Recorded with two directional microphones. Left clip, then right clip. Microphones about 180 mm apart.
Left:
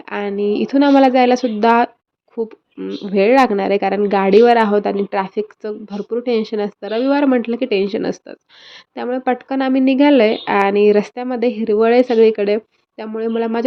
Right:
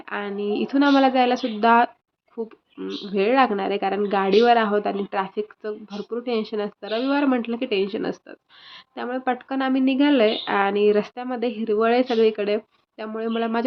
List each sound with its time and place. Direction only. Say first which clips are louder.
0.0 s speech: left 7 dB; 35° left (ahead or behind)